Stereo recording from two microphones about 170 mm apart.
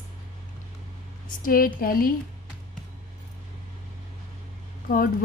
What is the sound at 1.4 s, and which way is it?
Speech, 55° left (ahead or behind).